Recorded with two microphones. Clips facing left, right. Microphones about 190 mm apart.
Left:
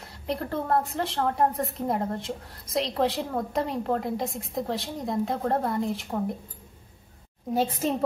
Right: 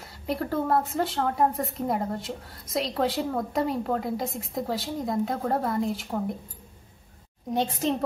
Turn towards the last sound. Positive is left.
turn(degrees=5)  # may be behind; listen again after turning